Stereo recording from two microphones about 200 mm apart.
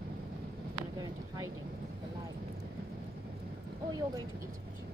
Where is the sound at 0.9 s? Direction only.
20° right (ahead or behind).